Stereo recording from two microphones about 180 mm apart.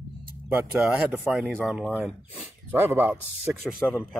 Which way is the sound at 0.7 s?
Centre (ahead or behind).